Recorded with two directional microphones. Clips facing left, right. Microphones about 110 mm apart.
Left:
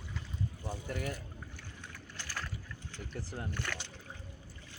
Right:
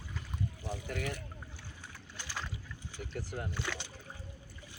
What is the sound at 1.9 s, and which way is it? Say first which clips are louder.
Boat: right 1 dB; 15° right (ahead or behind).